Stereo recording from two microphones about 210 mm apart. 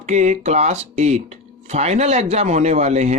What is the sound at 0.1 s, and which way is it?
Speech, 35° right (ahead or behind).